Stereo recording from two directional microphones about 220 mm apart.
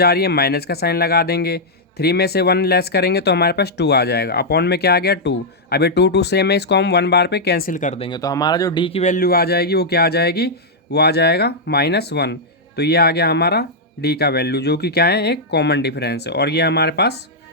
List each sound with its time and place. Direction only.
0.0 s speech: 45° left (ahead or behind)